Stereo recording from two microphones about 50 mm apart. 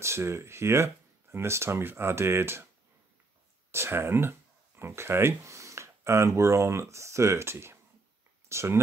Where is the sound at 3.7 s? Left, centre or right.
Right.